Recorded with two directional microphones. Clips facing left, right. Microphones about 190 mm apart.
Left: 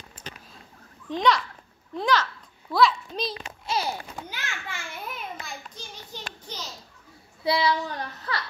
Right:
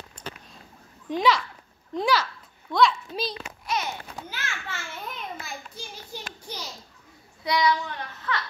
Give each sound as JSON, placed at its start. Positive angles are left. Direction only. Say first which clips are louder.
{"t": 1.0, "sound": "a child's voice", "louder": "even", "side_deg": -10}
{"t": 2.7, "sound": "a child's voice", "louder": "even", "side_deg": 0}
{"t": 3.6, "sound": "a child's voice", "louder": "left 1 dB", "side_deg": 30}
{"t": 4.3, "sound": "a child's voice", "louder": "right 1 dB", "side_deg": 15}
{"t": 5.8, "sound": "a sound", "louder": "right 2 dB", "side_deg": -10}
{"t": 7.4, "sound": "child singing", "louder": "even", "side_deg": 30}